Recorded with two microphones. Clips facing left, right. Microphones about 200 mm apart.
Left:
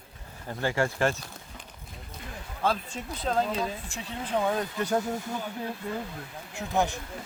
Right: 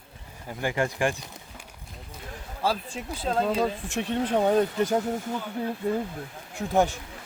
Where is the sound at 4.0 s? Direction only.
65° right (ahead or behind).